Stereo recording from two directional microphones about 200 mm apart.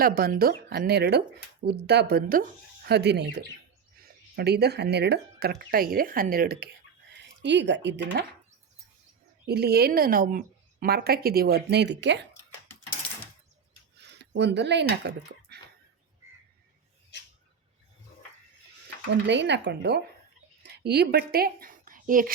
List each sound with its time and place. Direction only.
0.0 s speech: 45° right (ahead or behind)
7.1 s speech: 60° right (ahead or behind)
9.5 s speech: 50° right (ahead or behind)
13.9 s a sound: 60° right (ahead or behind)
19.1 s speech: 60° right (ahead or behind)
20.6 s a sound: 55° right (ahead or behind)